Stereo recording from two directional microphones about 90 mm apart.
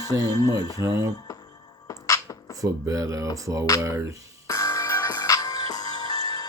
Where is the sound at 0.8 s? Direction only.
30° right (ahead or behind).